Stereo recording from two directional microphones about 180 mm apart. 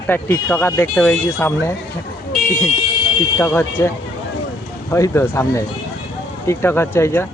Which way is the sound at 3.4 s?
10° left (ahead or behind).